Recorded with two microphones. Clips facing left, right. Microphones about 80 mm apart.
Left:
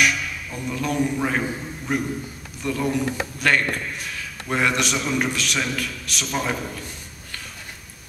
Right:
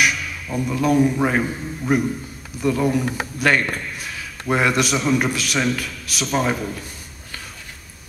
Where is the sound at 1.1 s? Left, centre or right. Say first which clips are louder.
Right 4 dB; centre.